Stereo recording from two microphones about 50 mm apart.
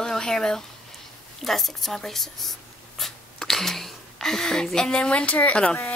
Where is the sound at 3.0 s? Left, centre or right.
Centre; by 5.8 s left.